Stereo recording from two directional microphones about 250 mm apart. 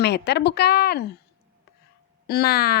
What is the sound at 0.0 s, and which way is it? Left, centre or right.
Speech, left.